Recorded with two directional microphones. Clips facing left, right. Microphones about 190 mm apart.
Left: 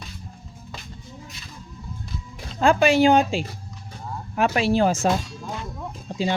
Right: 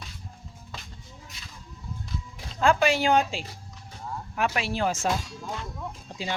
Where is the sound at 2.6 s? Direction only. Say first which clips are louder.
Left 5 dB; 20° left (ahead or behind).